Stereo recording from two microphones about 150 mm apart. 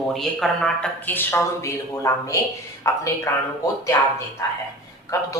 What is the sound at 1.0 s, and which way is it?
Speech, 15° left (ahead or behind).